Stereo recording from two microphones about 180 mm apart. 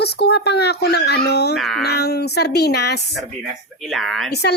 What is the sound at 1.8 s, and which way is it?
Speech, 65° left (ahead or behind).